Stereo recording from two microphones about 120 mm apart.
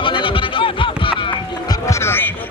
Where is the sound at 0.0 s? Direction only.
45° left (ahead or behind).